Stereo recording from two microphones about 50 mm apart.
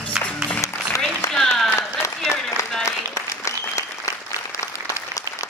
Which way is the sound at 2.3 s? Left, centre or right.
Left.